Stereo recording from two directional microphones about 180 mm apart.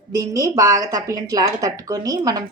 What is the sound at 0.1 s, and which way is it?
A woman's voice, 20° right (ahead or behind).